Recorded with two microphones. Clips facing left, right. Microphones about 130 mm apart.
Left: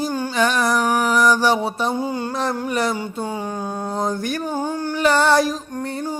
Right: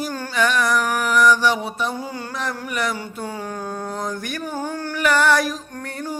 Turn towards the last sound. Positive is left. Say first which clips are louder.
# left 4 dB
turn(degrees=25)  # may be behind; listen again after turning